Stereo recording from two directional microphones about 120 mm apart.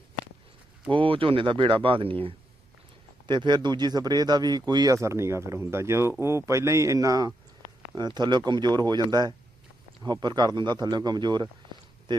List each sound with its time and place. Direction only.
0.9 s speech: 45° right (ahead or behind)
3.2 s speech: 40° right (ahead or behind)